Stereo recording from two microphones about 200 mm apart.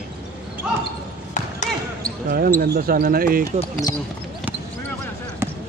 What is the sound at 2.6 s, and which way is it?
Speech, 45° right (ahead or behind).